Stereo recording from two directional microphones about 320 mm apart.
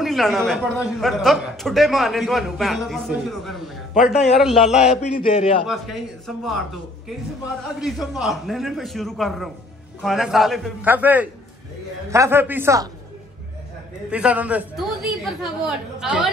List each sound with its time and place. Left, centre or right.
0.0 s a man's voice: centre
5.0 s a man's voice: centre
5.7 s a man's voice: centre
14.1 s a man's voice: centre
16.0 s a man's voice: centre